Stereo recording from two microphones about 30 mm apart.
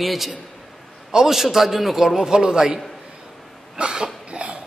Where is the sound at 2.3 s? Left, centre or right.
Right.